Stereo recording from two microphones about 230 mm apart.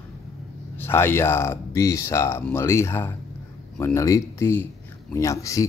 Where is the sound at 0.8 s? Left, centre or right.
Centre.